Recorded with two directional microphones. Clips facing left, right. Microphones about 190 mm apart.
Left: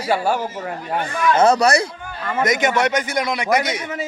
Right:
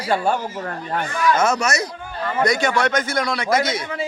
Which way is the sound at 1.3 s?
30° left (ahead or behind).